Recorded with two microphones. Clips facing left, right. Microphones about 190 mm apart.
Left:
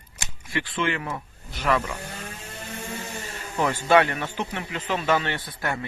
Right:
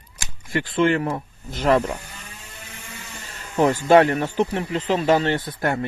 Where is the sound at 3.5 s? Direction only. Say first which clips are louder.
Right 5 dB; 40° right (ahead or behind).